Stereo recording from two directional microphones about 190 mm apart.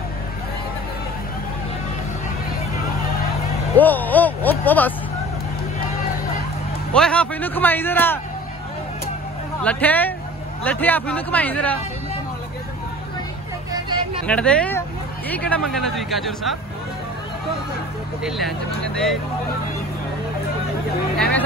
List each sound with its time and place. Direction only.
3.7 s a man's voice: 10° left (ahead or behind)
6.9 s a man's voice: 5° left (ahead or behind)
9.6 s a man's voice: 5° left (ahead or behind)
13.7 s vehicle: 25° right (ahead or behind)
14.2 s speech: 5° left (ahead or behind)
21.2 s music: 5° left (ahead or behind)